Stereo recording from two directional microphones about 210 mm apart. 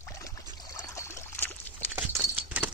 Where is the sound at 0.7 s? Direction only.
15° left (ahead or behind).